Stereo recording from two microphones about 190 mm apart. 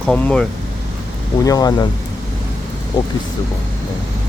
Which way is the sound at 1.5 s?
20° left (ahead or behind).